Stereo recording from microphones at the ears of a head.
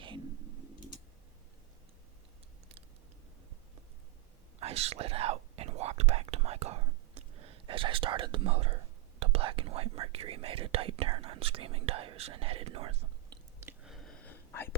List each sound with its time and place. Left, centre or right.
4.6 s speech: right